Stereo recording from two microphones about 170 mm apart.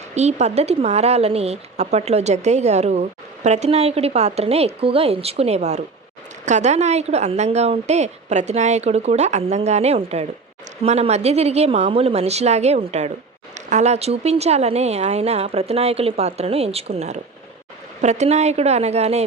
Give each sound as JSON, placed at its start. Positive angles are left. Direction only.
{"t": 0.1, "sound": "speech", "side_deg": -40}